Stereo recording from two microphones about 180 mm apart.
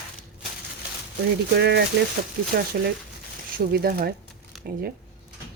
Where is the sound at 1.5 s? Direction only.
70° right (ahead or behind).